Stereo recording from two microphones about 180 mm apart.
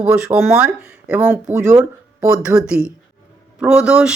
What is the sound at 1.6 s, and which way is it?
Speech, 20° right (ahead or behind).